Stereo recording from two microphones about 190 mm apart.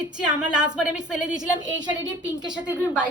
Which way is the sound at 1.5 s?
20° right (ahead or behind).